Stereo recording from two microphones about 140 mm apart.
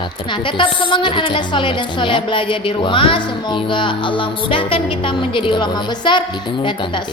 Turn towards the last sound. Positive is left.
turn(degrees=35)  # may be behind; listen again after turning